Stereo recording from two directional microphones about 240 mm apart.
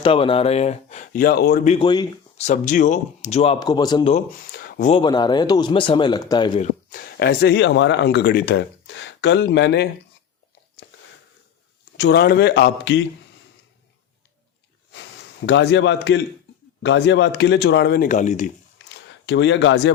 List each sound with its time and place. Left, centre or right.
0.0 s speech: left
2.5 s speech: left
4.5 s a sound: left
4.9 s speech: centre
6.9 s speech: left
10.8 s a sound: left
11.9 s speech: left
15.4 s speech: left
18.9 s a sound: left